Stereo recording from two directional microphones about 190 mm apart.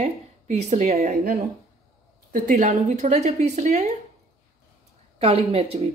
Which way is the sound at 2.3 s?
45° right (ahead or behind).